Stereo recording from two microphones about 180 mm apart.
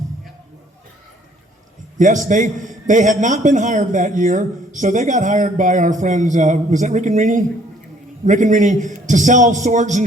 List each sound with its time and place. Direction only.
2.0 s a man's voice: 45° right (ahead or behind)